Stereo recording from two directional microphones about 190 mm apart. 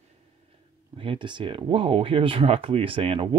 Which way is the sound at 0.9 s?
30° right (ahead or behind).